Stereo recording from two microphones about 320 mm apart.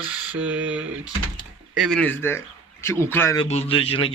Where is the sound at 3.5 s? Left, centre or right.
Centre.